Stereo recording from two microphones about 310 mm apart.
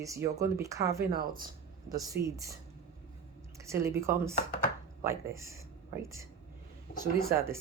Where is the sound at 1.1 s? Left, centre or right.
Right.